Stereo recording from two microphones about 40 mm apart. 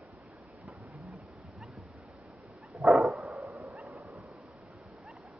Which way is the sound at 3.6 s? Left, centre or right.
Right.